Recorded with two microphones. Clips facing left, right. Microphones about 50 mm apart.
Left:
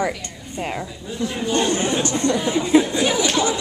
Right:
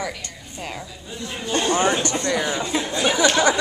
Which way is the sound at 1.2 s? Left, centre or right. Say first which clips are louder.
Left 4 dB; centre.